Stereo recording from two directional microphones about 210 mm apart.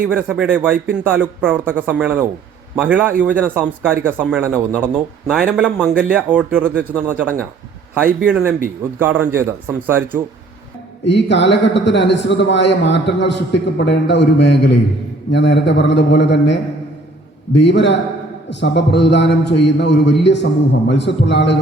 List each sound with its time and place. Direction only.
0.0 s a man's voice: 5° right (ahead or behind)
11.0 s a man's voice: 55° left (ahead or behind)